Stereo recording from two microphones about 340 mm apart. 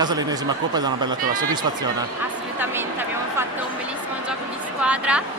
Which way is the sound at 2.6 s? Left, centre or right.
Centre.